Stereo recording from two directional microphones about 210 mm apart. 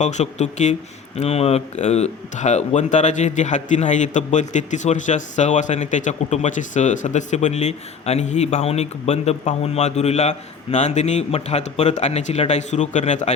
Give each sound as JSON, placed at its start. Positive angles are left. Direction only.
{"t": 0.0, "sound": "speech", "side_deg": 35}